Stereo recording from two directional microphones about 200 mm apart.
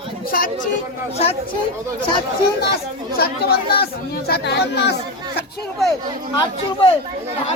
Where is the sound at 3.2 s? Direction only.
50° left (ahead or behind).